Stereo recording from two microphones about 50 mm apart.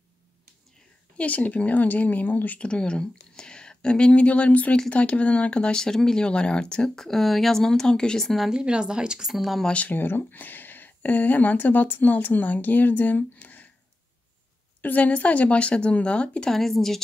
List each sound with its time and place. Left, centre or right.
1.1 s speech: left
2.6 s speech: centre
7.0 s speech: centre
8.5 s speech: centre
9.3 s speech: centre
9.8 s speech: left
14.8 s speech: left
16.5 s speech: centre